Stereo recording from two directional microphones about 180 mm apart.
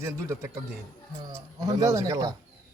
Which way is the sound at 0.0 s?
15° right (ahead or behind).